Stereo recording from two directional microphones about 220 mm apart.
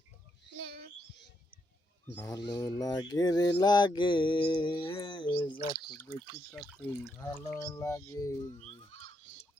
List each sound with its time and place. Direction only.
2.1 s speech: 15° left (ahead or behind)
3.6 s mantra: 20° left (ahead or behind)
6.5 s speech: 5° left (ahead or behind)
8.6 s sheep: 30° left (ahead or behind)